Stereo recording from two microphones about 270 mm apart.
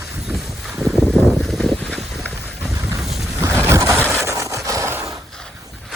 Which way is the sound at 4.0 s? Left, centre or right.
Centre.